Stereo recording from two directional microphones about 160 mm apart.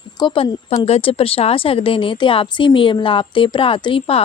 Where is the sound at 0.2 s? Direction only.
30° left (ahead or behind).